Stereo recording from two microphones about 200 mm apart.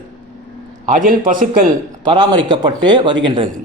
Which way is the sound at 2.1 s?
20° right (ahead or behind).